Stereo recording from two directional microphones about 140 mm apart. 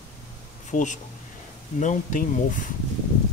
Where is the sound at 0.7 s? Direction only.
65° left (ahead or behind).